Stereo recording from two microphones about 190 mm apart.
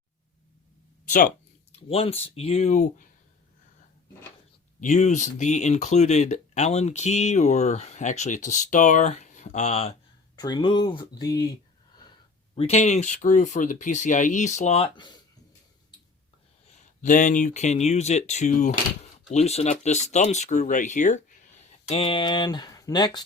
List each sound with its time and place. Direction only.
1.7 s speech: 30° left (ahead or behind)
4.8 s speech: 40° left (ahead or behind)
10.3 s speech: 20° left (ahead or behind)
12.5 s speech: 35° left (ahead or behind)
17.0 s speech: 40° left (ahead or behind)
21.8 s speech: 30° left (ahead or behind)